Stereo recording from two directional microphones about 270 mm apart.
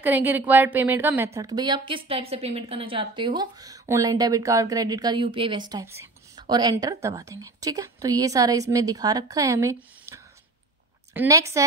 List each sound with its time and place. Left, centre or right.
0.0 s a woman's voice: centre